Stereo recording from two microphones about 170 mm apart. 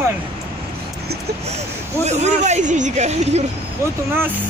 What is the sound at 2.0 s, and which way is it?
Speech, 40° right (ahead or behind).